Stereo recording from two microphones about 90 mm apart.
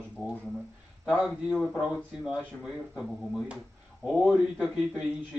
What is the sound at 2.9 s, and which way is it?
Speech, 10° right (ahead or behind).